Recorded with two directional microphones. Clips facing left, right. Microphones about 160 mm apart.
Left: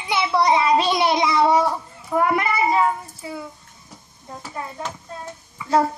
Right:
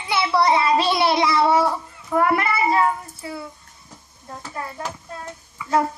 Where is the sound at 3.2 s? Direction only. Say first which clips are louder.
Even; 20° left (ahead or behind).